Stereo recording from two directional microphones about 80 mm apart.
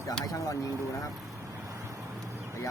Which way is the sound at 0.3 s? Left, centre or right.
Left.